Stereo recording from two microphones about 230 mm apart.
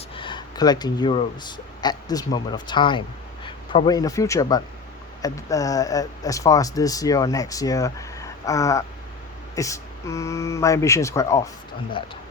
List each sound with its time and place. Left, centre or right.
0.2 s speech: centre